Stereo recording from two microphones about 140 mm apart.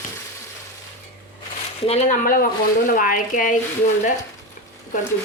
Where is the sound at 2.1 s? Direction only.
85° left; by 3.6 s 70° left (ahead or behind).